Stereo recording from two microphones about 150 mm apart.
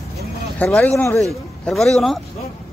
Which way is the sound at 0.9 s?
20° left (ahead or behind).